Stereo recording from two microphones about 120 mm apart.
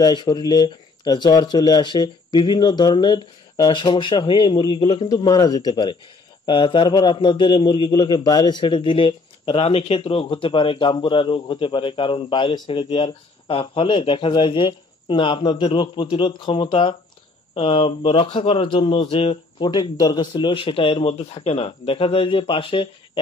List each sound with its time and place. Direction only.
0.0 s a man's voice: 35° left (ahead or behind)
19.7 s a man's voice: 35° left (ahead or behind)